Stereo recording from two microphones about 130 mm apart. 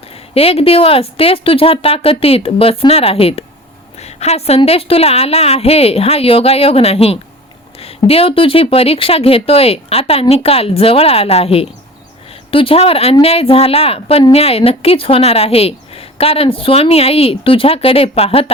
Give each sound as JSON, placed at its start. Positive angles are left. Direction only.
{"t": 0.3, "sound": "a woman's voice", "side_deg": 50}